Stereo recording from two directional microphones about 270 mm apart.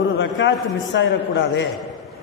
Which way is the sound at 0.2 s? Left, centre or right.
Left.